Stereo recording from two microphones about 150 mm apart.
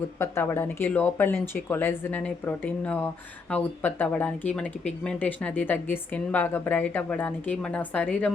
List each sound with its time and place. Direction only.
0.2 s a woman's voice: 15° left (ahead or behind)